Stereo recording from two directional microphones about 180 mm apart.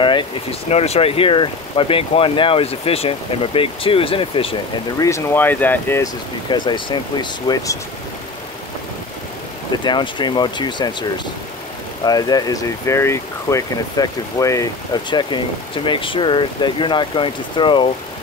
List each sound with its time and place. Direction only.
0.0 s speech: 30° left (ahead or behind)
4.9 s speech: 15° left (ahead or behind)
6.5 s speech: 25° left (ahead or behind)
9.8 s speech: 25° left (ahead or behind)